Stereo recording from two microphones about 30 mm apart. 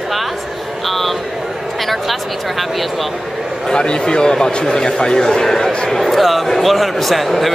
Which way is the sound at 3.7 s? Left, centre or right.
Left.